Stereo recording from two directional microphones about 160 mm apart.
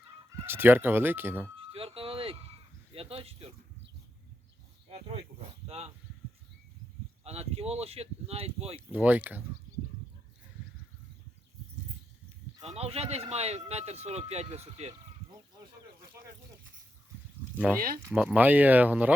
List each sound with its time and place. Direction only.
0.4 s speech: 15° right (ahead or behind)
1.5 s vehicle: 35° right (ahead or behind)
2.9 s cricket: 35° right (ahead or behind)
5.6 s speech: 40° right (ahead or behind)
7.3 s speech: 40° right (ahead or behind)
8.9 s speech: 10° right (ahead or behind)
12.6 s speech: 40° right (ahead or behind)
17.7 s speech: 65° right (ahead or behind)
18.1 s speech: 5° right (ahead or behind)